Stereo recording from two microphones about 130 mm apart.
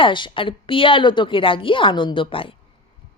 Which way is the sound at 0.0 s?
40° left (ahead or behind).